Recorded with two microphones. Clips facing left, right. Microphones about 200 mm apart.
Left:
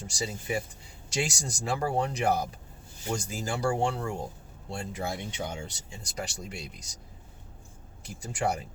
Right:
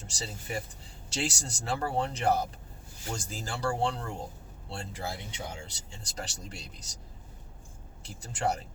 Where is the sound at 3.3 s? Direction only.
10° left (ahead or behind).